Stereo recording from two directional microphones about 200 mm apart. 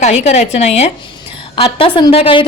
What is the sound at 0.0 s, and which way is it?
Speech, 35° left (ahead or behind).